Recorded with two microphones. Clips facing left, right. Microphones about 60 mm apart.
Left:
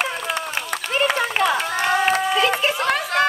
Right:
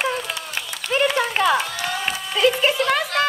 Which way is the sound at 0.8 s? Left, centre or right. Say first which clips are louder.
Right 2 dB; left.